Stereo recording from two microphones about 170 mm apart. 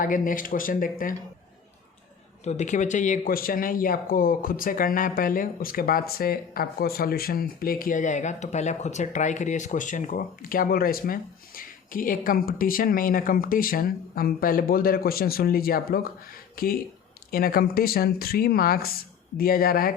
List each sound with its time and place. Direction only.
0.0 s speech: 50° left (ahead or behind)
2.4 s speech: 45° left (ahead or behind); by 19.9 s 60° left (ahead or behind)